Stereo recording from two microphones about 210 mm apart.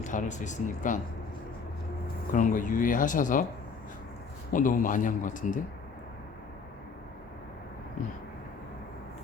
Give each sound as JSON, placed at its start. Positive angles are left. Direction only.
{"t": 0.0, "sound": "speech", "side_deg": 35}
{"t": 2.3, "sound": "speech", "side_deg": 40}
{"t": 4.5, "sound": "speech", "side_deg": 40}